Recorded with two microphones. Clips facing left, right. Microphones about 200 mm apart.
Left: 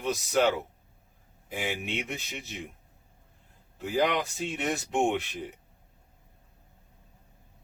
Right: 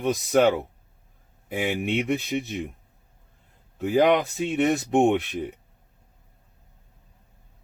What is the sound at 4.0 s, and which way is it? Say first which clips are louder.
A man's voice: right 7 dB; 60° right (ahead or behind).